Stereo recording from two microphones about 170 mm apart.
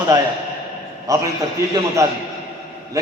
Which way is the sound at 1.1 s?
20° right (ahead or behind).